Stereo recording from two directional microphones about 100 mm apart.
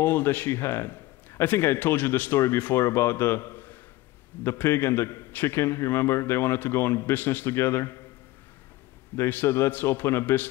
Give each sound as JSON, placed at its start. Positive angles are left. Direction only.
{"t": 0.0, "sound": "a man's voice", "side_deg": 20}
{"t": 9.1, "sound": "a man's voice", "side_deg": 20}